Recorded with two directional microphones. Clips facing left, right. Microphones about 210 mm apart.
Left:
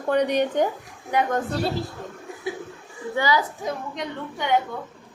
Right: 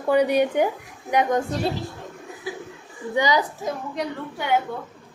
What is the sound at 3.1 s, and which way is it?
Speech, 15° right (ahead or behind).